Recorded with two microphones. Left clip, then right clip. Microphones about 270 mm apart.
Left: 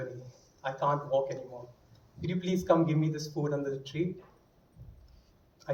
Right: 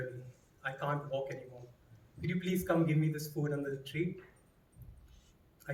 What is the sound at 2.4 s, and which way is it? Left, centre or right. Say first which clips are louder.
Speech: left 6 dB; right.